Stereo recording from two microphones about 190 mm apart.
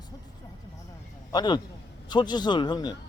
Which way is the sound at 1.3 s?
20° left (ahead or behind).